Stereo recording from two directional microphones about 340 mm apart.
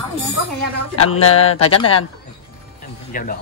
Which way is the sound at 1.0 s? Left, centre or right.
Left.